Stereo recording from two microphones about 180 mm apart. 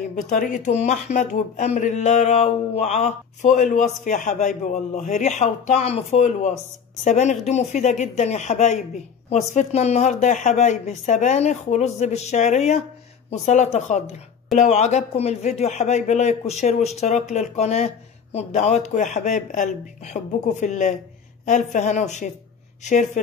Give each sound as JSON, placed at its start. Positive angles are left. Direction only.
{"t": 0.1, "sound": "speech", "side_deg": 45}